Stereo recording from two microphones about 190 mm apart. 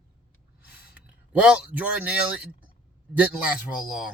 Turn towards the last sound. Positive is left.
turn(degrees=-5)  # may be behind; listen again after turning